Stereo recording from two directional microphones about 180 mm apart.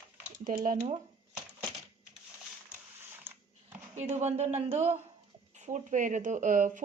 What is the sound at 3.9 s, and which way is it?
A woman's voice, 40° right (ahead or behind).